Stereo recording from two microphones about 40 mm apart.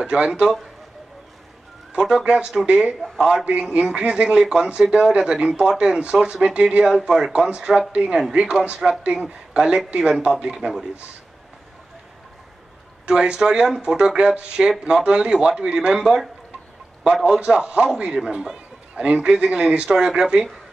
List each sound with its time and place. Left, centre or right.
0.0 s speech: right
2.0 s speech: centre
3.2 s speech: centre
3.7 s speech: right
9.0 s speech: right
9.5 s speech: centre
13.0 s a man's voice: right